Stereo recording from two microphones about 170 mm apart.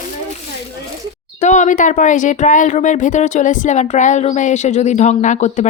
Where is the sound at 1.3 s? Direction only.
45° left (ahead or behind).